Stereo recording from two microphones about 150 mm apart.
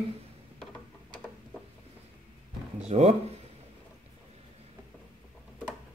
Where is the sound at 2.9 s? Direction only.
45° right (ahead or behind).